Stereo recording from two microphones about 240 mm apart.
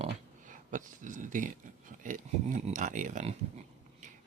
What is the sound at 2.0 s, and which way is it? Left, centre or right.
Speech, right.